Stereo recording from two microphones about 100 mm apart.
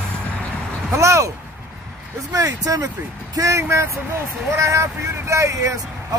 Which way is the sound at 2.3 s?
35° right (ahead or behind).